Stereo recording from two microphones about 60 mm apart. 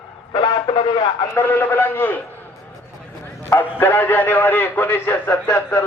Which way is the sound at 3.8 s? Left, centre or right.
Left.